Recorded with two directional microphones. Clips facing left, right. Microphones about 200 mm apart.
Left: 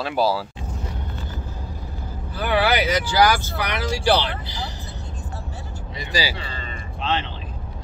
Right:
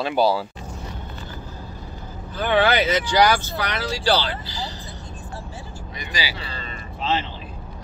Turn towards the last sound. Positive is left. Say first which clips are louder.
# right 1 dB
turn(degrees=-5)  # may be behind; listen again after turning